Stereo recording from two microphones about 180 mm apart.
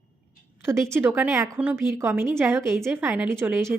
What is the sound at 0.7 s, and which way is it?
Speech, 15° right (ahead or behind).